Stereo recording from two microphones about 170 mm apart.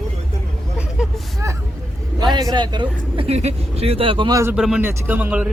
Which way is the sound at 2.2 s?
25° right (ahead or behind).